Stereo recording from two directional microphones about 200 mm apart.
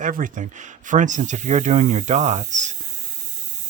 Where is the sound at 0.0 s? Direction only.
40° right (ahead or behind).